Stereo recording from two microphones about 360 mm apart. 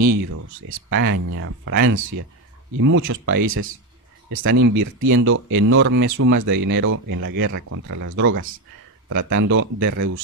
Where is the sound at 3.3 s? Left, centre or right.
Right.